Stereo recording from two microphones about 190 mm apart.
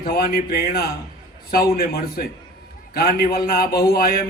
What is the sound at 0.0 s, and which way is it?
A man's voice, 55° left (ahead or behind).